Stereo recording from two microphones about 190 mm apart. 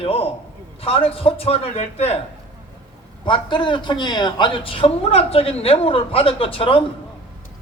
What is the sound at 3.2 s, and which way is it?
Speech, 25° left (ahead or behind).